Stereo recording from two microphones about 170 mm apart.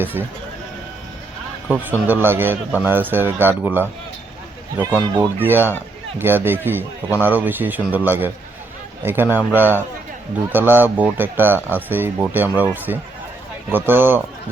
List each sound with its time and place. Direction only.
0.0 s speech: 10° right (ahead or behind)
1.6 s speech: 10° right (ahead or behind)
5.4 s speech: 10° right (ahead or behind)